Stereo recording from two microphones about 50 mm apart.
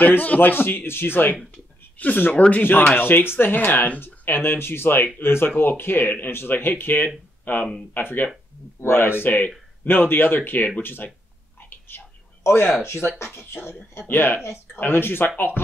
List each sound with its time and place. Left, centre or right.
0.2 s speech: left
0.5 s speech: left
8.7 s speech: left
12.4 s speech: left